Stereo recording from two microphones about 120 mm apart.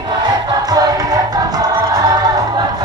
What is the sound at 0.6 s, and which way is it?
Music, 30° right (ahead or behind).